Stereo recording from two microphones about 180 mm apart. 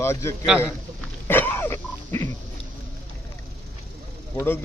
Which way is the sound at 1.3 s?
10° left (ahead or behind).